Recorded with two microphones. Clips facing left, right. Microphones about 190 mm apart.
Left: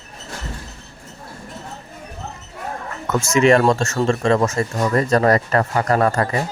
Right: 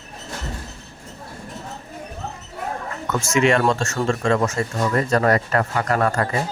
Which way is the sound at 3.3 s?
40° left (ahead or behind).